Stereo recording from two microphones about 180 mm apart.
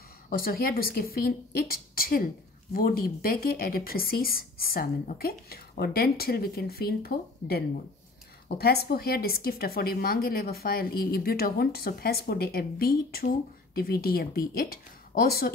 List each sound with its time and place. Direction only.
0.3 s a woman's voice: 55° left (ahead or behind)